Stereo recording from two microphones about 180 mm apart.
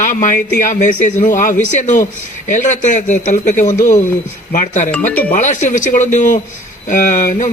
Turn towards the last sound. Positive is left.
turn(degrees=45)  # may be behind; listen again after turning